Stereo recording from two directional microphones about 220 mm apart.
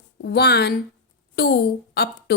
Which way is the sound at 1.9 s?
45° left (ahead or behind).